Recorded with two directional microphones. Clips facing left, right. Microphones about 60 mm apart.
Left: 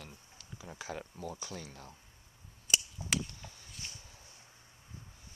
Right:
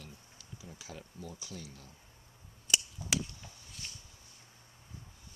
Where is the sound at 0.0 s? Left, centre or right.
Left.